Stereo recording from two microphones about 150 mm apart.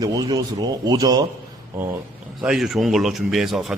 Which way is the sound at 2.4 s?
5° right (ahead or behind).